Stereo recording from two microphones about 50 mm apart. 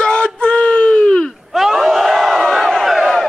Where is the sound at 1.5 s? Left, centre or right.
Centre.